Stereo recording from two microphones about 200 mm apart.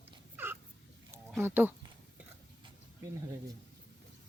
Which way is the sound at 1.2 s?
10° right (ahead or behind).